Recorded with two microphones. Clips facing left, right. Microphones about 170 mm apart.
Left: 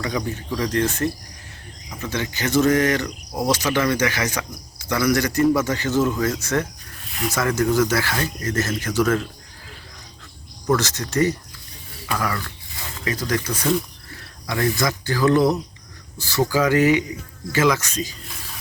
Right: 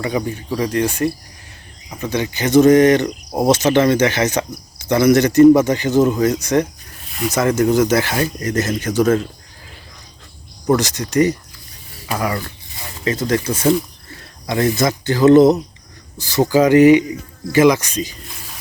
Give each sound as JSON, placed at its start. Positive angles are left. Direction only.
{"t": 0.3, "sound": "speech", "side_deg": -10}
{"t": 10.8, "sound": "speech", "side_deg": -15}